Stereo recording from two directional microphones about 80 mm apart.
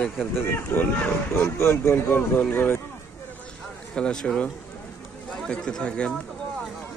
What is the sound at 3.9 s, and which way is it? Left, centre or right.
Speech, centre.